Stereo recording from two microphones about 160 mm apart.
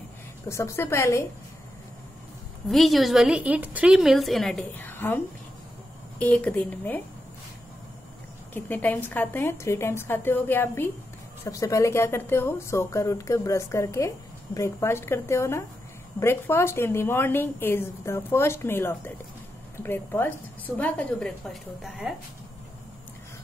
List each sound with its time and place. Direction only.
0.5 s speech: 15° left (ahead or behind)
2.7 s a woman's voice: centre (ahead or behind)
8.5 s speech: 10° left (ahead or behind)